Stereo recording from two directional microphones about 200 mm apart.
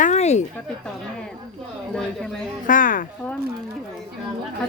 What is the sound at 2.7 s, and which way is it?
Speech, 45° left (ahead or behind).